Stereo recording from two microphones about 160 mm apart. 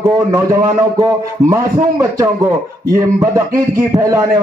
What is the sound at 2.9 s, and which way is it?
Music, 20° right (ahead or behind).